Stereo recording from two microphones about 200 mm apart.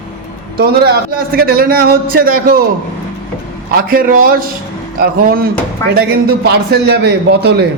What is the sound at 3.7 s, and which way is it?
A man's voice, 50° right (ahead or behind).